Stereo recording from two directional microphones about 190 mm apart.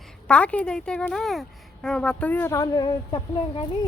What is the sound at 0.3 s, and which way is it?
Speech, 5° left (ahead or behind).